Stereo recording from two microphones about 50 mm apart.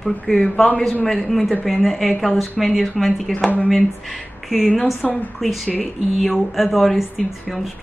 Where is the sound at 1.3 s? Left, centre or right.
Centre.